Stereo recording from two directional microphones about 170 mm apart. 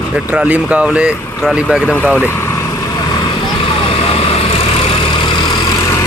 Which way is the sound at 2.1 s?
15° left (ahead or behind).